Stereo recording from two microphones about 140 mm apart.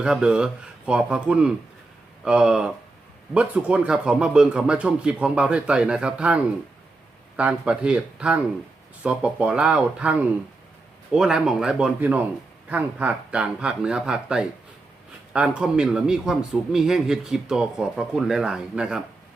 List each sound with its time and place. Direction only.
0.0 s a man's voice: 5° right (ahead or behind)